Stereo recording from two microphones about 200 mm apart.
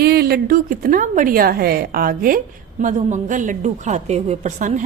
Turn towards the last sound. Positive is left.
turn(degrees=-40)  # may be behind; listen again after turning